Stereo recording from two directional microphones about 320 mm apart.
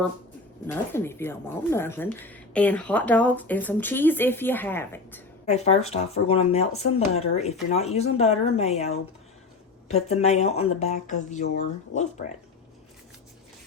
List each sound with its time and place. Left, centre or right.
0.7 s speech: centre
5.5 s speech: centre
9.9 s speech: centre